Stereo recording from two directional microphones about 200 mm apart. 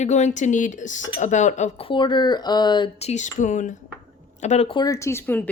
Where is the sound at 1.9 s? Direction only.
20° left (ahead or behind).